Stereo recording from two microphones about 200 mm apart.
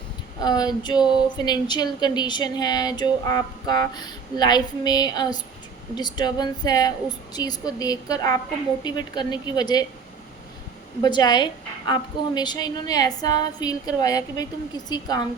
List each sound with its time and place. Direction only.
0.3 s speech: 20° left (ahead or behind)
11.0 s speech: 20° left (ahead or behind)